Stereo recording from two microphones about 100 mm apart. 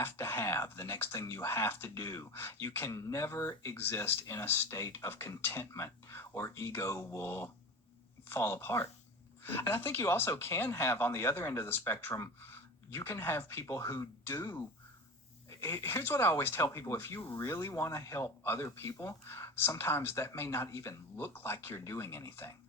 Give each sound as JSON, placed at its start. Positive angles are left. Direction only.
{"t": 0.0, "sound": "speech", "side_deg": 25}